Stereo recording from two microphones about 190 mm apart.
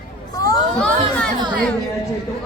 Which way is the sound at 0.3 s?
20° left (ahead or behind).